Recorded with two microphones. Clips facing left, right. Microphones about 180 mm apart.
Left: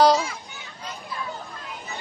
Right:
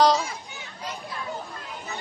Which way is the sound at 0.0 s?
Centre (ahead or behind).